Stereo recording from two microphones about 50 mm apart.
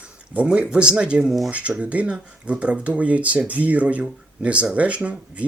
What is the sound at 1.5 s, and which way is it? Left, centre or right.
Speech, right.